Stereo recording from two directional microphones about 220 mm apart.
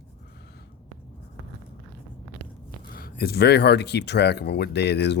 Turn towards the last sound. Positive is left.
turn(degrees=50)  # may be behind; listen again after turning